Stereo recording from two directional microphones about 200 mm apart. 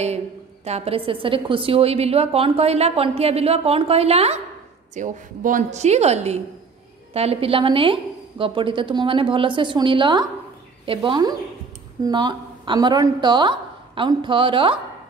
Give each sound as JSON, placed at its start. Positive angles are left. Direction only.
{"t": 0.7, "sound": "a woman's voice", "side_deg": -30}